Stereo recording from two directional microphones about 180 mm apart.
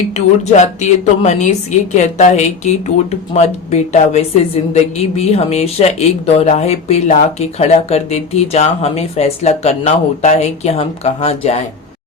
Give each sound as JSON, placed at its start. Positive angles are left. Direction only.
{"t": 0.4, "sound": "speech", "side_deg": 40}